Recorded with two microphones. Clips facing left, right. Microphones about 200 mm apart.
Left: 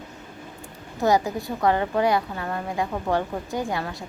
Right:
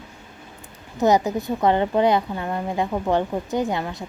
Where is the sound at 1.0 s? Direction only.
20° right (ahead or behind).